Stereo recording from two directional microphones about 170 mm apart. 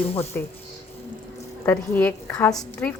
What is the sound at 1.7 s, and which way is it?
A woman's voice, 10° left (ahead or behind).